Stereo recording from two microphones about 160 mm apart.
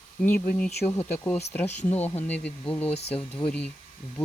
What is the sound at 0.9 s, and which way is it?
Speech, 15° left (ahead or behind).